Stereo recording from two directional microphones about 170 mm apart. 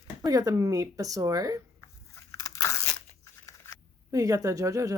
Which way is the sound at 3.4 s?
15° left (ahead or behind).